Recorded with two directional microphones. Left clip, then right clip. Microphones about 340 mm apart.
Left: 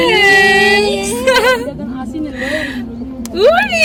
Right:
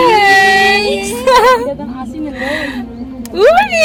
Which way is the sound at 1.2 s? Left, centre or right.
Centre.